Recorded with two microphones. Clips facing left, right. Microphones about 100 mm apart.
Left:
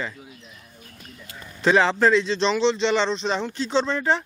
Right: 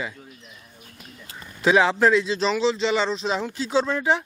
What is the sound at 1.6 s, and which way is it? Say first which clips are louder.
Speech: even; 5° right (ahead or behind).